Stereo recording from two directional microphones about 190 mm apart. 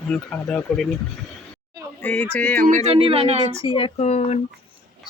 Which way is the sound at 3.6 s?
25° left (ahead or behind).